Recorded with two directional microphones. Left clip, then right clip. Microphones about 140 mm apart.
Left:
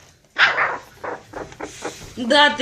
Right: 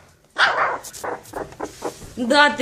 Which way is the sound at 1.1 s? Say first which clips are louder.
Right 1 dB; 25° right (ahead or behind).